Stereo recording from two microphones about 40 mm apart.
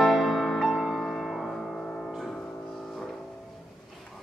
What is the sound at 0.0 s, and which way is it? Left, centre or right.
Music, centre.